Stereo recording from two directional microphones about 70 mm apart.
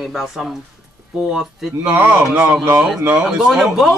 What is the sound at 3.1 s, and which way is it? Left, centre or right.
Speech, centre.